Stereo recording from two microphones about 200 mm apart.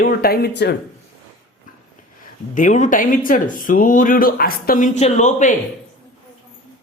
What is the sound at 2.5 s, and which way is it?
Speech, 40° left (ahead or behind).